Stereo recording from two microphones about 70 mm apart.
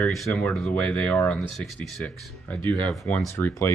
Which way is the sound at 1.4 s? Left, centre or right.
Centre.